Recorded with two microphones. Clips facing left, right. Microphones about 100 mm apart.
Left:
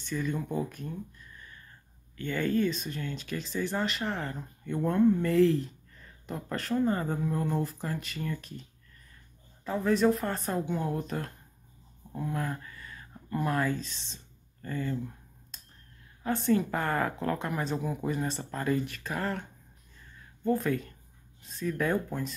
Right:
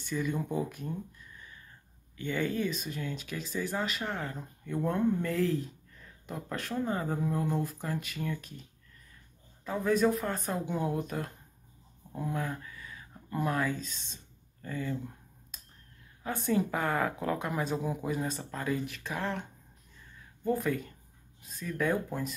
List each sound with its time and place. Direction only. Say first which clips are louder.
0.0 s speech: even; 10° right (ahead or behind)
2.1 s speech: left 3 dB; 15° right (ahead or behind)
9.7 s speech: left 2 dB; centre (ahead or behind)
12.4 s speech: left 1 dB; centre (ahead or behind)
16.4 s speech: left 1 dB; 10° right (ahead or behind)
20.4 s speech: left 2 dB; 5° right (ahead or behind)